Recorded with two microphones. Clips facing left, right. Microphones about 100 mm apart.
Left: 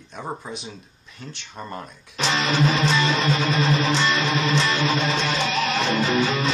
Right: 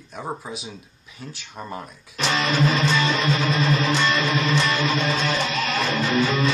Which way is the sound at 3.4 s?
30° left (ahead or behind).